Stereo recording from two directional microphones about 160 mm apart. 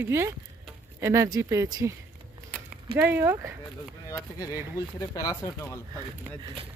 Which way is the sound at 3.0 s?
15° right (ahead or behind).